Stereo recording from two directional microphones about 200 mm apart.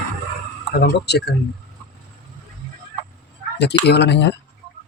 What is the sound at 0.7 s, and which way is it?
Speech, 55° left (ahead or behind).